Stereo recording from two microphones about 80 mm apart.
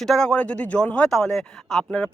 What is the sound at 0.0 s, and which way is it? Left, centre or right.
Speech, centre.